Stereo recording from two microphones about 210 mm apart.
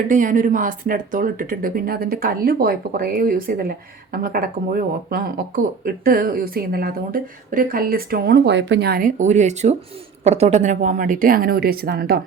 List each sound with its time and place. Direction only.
0.1 s a woman's voice: 40° right (ahead or behind)